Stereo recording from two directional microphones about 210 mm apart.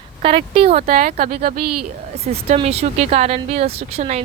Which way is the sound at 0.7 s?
40° right (ahead or behind).